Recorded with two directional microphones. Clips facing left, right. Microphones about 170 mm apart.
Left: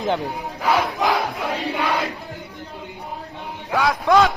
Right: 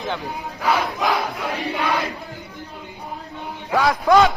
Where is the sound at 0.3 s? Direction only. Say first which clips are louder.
Left 1 dB; centre (ahead or behind).